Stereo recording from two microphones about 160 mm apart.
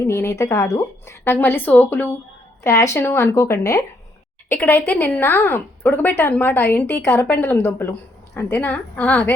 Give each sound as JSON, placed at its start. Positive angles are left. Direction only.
{"t": 0.0, "sound": "speech", "side_deg": 20}